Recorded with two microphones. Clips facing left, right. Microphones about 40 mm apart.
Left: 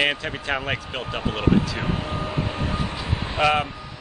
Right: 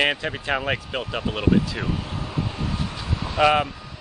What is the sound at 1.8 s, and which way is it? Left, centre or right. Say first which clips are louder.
Vehicle: left 2 dB; left.